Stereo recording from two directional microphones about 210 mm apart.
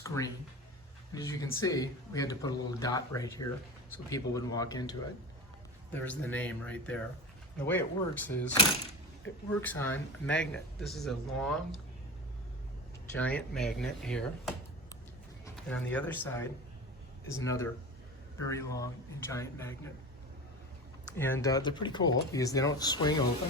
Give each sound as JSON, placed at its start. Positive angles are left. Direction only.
{"t": 0.0, "sound": "a sound", "side_deg": 15}
{"t": 1.1, "sound": "speech", "side_deg": 15}
{"t": 9.6, "sound": "a man's voice", "side_deg": 10}
{"t": 13.1, "sound": "a man's voice", "side_deg": 5}
{"t": 15.5, "sound": "speech", "side_deg": 5}
{"t": 21.1, "sound": "speech", "side_deg": 10}